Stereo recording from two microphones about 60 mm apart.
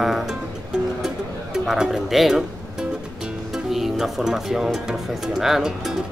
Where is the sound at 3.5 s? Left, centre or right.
Centre.